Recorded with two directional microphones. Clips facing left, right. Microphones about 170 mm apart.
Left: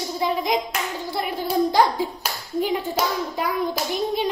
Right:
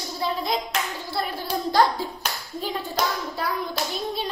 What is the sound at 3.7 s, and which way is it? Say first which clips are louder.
Hands: left 4 dB; 15° left (ahead or behind).